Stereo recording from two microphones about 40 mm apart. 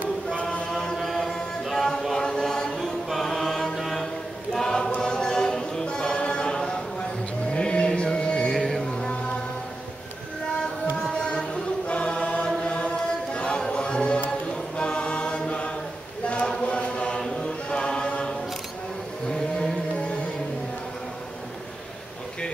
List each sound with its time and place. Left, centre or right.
0.9 s a capella: centre
2.1 s chant: centre
2.8 s chant: centre
4.6 s choir: centre
5.0 s music: centre
5.9 s a sound: left
7.5 s music: left
8.5 s music: centre
11.0 s music: centre
11.2 s choir: left
12.6 s music: left
14.8 s chant: left
17.4 s choir: left
19.2 s a sound: centre